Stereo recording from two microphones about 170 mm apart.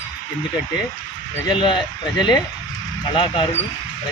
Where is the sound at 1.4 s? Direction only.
30° left (ahead or behind).